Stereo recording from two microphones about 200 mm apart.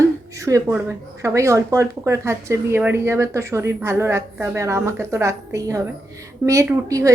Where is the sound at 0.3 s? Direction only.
15° right (ahead or behind).